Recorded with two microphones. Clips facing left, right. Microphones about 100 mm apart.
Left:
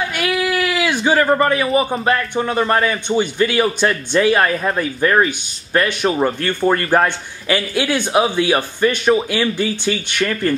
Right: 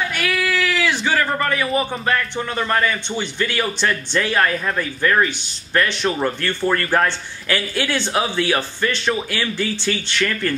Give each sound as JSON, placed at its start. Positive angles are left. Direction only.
{"t": 0.1, "sound": "a sound", "side_deg": 20}
{"t": 2.3, "sound": "a man's voice", "side_deg": 15}
{"t": 5.9, "sound": "a man's voice", "side_deg": 15}